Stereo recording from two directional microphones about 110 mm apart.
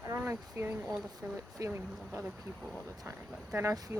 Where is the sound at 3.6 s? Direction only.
25° right (ahead or behind).